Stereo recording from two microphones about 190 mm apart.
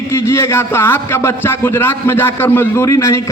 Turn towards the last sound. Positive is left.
turn(degrees=15)  # may be behind; listen again after turning